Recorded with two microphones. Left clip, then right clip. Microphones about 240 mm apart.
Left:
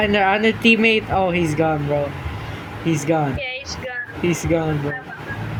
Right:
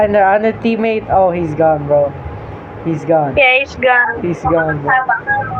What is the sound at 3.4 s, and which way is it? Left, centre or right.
Speech, centre.